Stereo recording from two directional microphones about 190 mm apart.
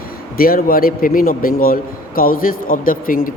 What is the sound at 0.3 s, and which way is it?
A man's voice, 50° left (ahead or behind).